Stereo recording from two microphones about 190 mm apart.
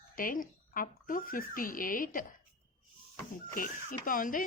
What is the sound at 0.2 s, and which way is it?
A woman's voice, 45° left (ahead or behind).